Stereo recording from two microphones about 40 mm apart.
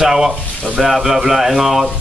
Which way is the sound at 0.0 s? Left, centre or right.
Centre.